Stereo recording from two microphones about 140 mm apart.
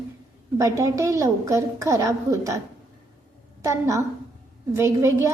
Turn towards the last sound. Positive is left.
turn(degrees=-20)  # may be behind; listen again after turning